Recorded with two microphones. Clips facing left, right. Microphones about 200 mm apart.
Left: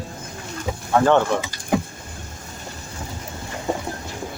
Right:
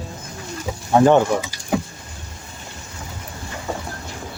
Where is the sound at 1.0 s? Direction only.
15° right (ahead or behind).